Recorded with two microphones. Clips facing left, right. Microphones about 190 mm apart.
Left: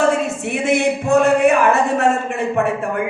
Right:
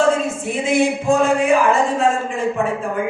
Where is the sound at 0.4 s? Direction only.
65° left (ahead or behind).